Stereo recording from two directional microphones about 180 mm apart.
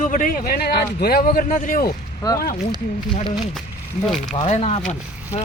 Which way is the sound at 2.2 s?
20° left (ahead or behind).